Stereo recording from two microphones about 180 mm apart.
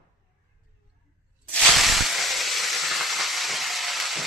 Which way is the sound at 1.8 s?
Centre (ahead or behind).